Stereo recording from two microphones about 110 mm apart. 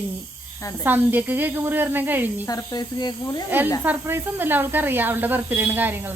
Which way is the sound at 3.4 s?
20° right (ahead or behind).